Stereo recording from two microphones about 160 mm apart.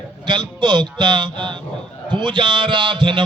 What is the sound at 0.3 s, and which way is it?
A man's voice, 30° right (ahead or behind).